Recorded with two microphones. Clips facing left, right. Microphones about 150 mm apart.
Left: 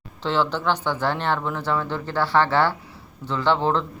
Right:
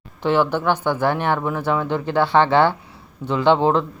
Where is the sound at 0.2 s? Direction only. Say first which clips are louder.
Right 5 dB; 15° right (ahead or behind).